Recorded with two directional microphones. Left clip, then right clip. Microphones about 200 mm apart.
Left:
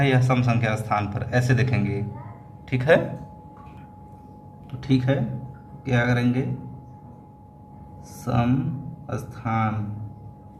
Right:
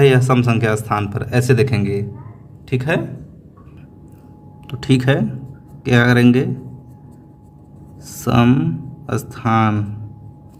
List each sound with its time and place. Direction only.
0.0 s speech: 45° right (ahead or behind)
2.6 s a man's voice: 30° right (ahead or behind)
4.8 s speech: 55° right (ahead or behind)
8.0 s speech: 55° right (ahead or behind)